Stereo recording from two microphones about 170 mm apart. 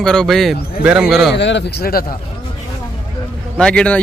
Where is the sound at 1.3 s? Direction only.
90° left; by 2.0 s 65° left (ahead or behind).